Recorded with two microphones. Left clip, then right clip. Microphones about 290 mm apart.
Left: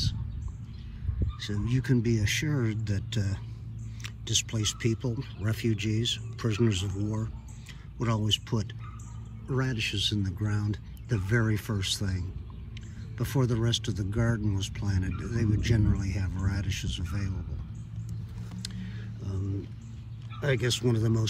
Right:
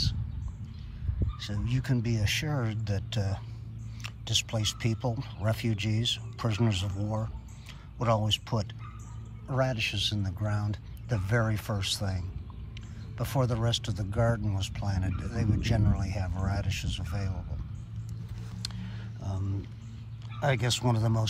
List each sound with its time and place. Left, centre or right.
1.2 s speech: centre
18.6 s a sound: centre
20.4 s speech: centre